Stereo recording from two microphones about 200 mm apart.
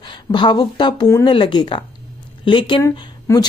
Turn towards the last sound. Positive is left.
turn(degrees=20)  # may be behind; listen again after turning